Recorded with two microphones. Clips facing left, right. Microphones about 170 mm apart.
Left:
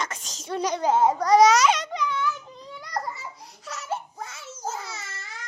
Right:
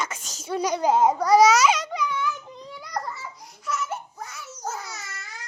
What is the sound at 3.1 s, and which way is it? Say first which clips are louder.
Babbling: right 1 dB; 20° left (ahead or behind).